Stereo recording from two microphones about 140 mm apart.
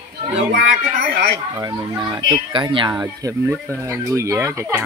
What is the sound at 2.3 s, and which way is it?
Speech, 35° right (ahead or behind).